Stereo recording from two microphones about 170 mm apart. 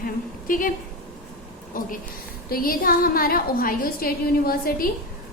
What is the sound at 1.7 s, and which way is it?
A woman's voice, 55° left (ahead or behind).